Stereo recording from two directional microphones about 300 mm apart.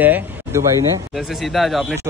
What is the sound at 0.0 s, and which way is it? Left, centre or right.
Speech, centre.